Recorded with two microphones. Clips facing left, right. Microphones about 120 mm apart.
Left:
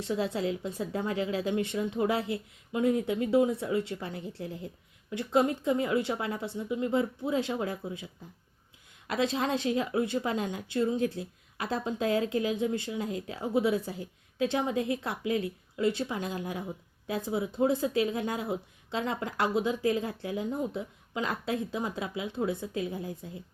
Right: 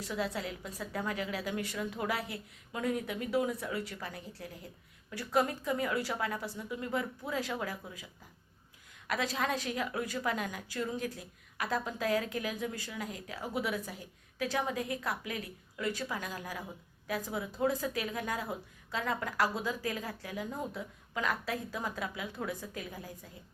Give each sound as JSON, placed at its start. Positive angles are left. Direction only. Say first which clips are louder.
{"t": 0.0, "sound": "a woman's voice", "louder": "left 6 dB", "side_deg": 25}